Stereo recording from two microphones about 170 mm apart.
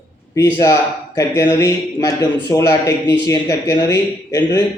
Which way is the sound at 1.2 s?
20° left (ahead or behind).